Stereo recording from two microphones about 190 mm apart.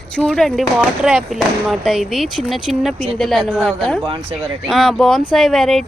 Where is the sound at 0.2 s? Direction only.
Centre (ahead or behind).